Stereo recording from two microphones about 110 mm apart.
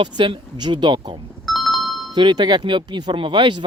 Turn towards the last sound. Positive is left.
turn(degrees=-45)  # may be behind; listen again after turning